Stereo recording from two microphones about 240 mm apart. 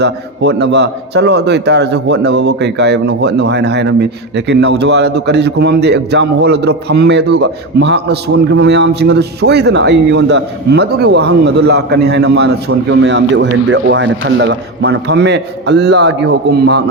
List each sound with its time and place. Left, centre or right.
0.0 s a man's voice: right